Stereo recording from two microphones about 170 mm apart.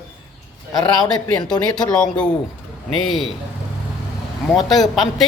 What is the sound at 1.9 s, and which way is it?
A man's voice, 5° left (ahead or behind).